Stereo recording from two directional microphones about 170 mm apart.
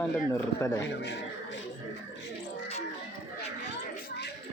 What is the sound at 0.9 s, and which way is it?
Speech, 80° left.